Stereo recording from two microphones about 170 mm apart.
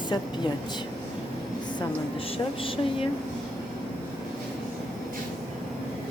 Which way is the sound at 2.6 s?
30° left (ahead or behind).